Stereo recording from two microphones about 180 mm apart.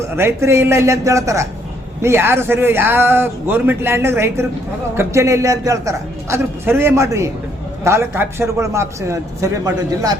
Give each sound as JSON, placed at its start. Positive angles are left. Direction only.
{"t": 0.2, "sound": "a man's voice", "side_deg": -15}